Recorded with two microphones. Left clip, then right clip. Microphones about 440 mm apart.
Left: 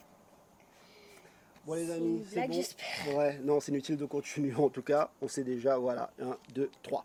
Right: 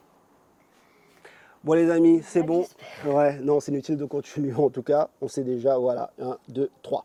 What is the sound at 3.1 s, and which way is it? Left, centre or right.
Speech, right.